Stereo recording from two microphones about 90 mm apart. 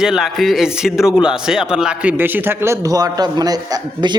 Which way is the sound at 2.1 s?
25° right (ahead or behind).